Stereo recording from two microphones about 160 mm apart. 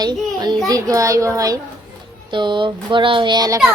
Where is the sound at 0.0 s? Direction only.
25° right (ahead or behind).